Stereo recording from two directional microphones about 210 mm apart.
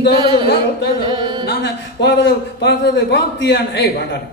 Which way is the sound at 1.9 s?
55° left (ahead or behind).